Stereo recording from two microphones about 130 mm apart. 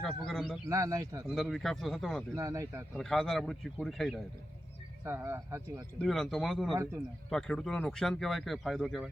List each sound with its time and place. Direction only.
0.0 s speech: 5° left (ahead or behind)
0.7 s speech: 25° right (ahead or behind)
1.3 s speech: centre (ahead or behind)
2.3 s speech: 25° right (ahead or behind)
2.9 s speech: 5° left (ahead or behind)
5.0 s speech: 20° right (ahead or behind)
6.0 s speech: centre (ahead or behind)